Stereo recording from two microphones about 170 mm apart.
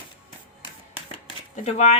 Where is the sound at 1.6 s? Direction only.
40° left (ahead or behind).